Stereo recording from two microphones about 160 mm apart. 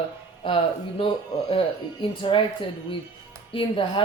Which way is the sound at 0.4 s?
35° left (ahead or behind).